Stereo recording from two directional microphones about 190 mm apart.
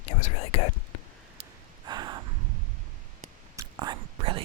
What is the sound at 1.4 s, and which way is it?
Snort, 25° right (ahead or behind).